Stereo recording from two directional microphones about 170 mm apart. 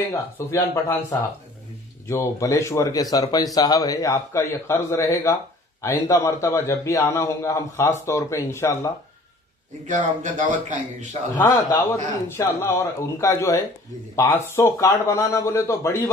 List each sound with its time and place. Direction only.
0.1 s a man's voice: 15° left (ahead or behind)
2.0 s a man's voice: 15° left (ahead or behind)
9.8 s a man's voice: 50° right (ahead or behind)
11.4 s a man's voice: 20° left (ahead or behind)